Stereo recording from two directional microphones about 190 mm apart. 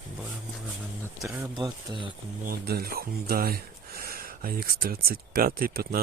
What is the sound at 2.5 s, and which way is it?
Speech, 55° right (ahead or behind).